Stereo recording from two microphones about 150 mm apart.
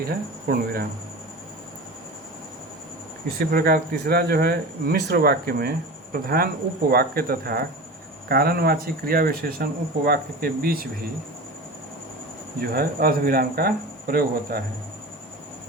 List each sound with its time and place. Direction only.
0.0 s speech: 85° right
3.3 s speech: 90° right
12.5 s speech: 90° right